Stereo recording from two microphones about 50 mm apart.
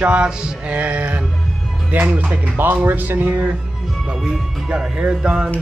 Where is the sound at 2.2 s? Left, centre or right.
Right.